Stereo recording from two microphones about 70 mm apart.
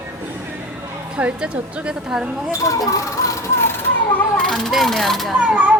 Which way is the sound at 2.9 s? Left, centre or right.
Left.